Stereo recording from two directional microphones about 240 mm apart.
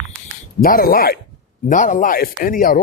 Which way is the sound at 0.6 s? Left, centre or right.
Left.